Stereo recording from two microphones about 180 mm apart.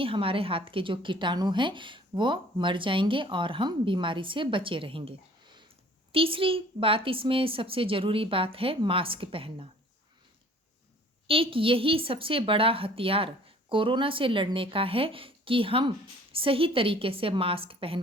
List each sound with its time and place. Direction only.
0.0 s a woman's voice: 30° right (ahead or behind)
11.3 s a woman's voice: 30° right (ahead or behind)